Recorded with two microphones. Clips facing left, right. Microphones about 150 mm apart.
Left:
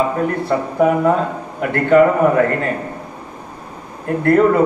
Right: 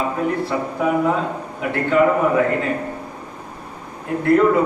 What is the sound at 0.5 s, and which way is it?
A man's voice, 50° left (ahead or behind).